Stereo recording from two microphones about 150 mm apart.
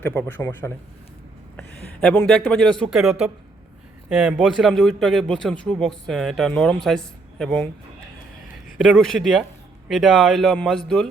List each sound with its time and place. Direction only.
0.0 s a man's voice: 10° left (ahead or behind)
8.8 s speech: centre (ahead or behind)